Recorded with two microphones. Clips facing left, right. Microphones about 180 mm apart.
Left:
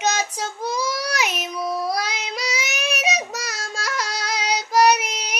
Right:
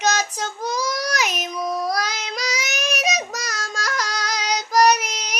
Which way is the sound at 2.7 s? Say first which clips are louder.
Right 1 dB; 35° right (ahead or behind).